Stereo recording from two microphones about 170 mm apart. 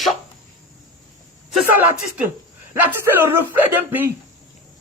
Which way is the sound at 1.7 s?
10° right (ahead or behind).